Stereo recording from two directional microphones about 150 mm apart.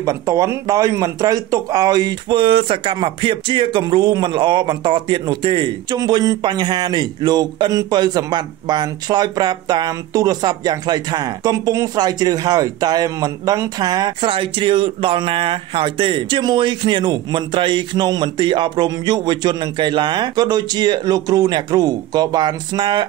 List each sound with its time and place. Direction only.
0.0 s speech: 20° right (ahead or behind)